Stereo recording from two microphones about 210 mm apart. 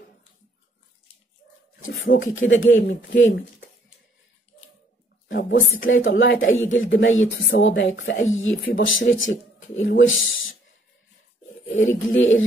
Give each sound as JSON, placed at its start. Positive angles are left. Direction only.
{"t": 1.8, "sound": "speech", "side_deg": 40}
{"t": 2.4, "sound": "speech", "side_deg": 65}
{"t": 2.7, "sound": "speech", "side_deg": 40}
{"t": 3.2, "sound": "speech", "side_deg": 60}
{"t": 5.3, "sound": "a woman's voice", "side_deg": 60}
{"t": 11.6, "sound": "speech", "side_deg": 65}